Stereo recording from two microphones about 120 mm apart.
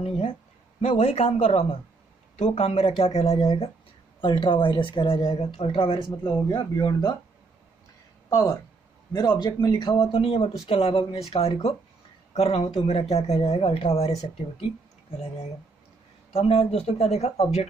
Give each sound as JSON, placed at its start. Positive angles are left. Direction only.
{"t": 0.7, "sound": "speech", "side_deg": 60}
{"t": 4.2, "sound": "a woman's voice", "side_deg": 45}
{"t": 8.3, "sound": "speech", "side_deg": 30}
{"t": 9.9, "sound": "a woman's voice", "side_deg": 50}
{"t": 16.3, "sound": "speech", "side_deg": 60}